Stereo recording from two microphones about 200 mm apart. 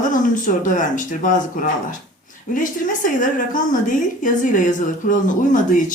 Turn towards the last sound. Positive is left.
turn(degrees=40)  # may be behind; listen again after turning